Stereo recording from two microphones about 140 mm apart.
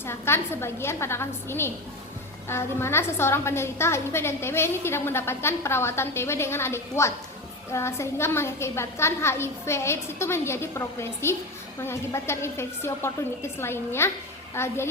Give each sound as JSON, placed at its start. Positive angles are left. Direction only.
{"t": 0.0, "sound": "a woman's voice", "side_deg": 15}